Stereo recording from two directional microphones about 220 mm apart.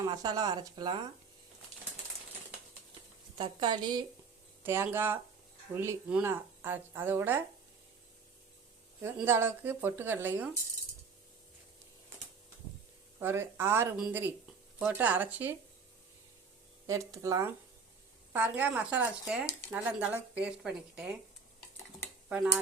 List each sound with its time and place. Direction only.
0.1 s speech: 20° right (ahead or behind)
3.3 s a woman's voice: 20° right (ahead or behind)
9.0 s speech: 10° right (ahead or behind)
13.1 s speech: 10° right (ahead or behind)
16.8 s speech: 15° right (ahead or behind)